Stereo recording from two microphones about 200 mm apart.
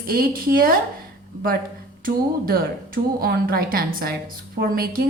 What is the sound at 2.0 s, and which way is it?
A woman's voice, 45° right (ahead or behind).